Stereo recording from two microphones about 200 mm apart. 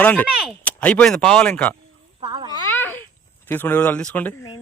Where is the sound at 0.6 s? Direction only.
5° left (ahead or behind).